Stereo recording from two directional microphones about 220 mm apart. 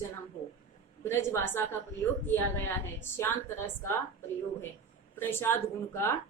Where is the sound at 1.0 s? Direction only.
10° left (ahead or behind).